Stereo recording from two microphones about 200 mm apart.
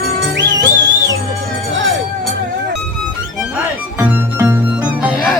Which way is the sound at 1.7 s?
65° right (ahead or behind).